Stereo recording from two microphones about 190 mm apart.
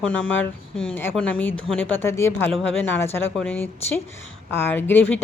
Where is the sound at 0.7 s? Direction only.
30° left (ahead or behind).